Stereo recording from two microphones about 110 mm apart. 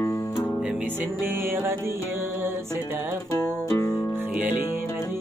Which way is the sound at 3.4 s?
30° left (ahead or behind).